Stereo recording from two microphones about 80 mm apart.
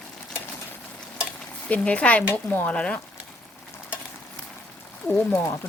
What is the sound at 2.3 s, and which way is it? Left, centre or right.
Speech, left.